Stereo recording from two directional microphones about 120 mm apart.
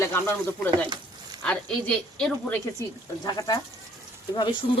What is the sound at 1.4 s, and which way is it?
Speech, 5° left (ahead or behind).